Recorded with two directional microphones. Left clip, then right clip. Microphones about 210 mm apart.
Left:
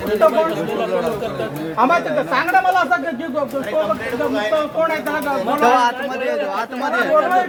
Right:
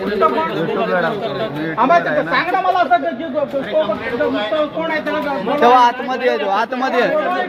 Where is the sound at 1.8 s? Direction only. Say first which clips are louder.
Right 2 dB; 5° right (ahead or behind).